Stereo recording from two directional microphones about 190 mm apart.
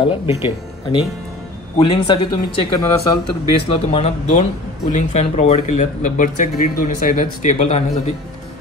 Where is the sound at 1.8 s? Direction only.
25° left (ahead or behind).